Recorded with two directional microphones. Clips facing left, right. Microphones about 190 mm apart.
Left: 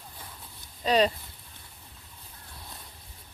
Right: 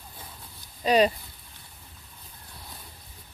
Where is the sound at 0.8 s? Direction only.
10° right (ahead or behind).